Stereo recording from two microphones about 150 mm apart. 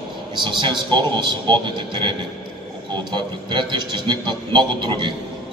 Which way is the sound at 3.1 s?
30° right (ahead or behind).